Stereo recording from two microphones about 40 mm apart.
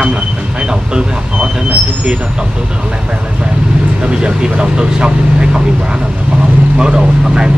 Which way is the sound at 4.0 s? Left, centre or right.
Right.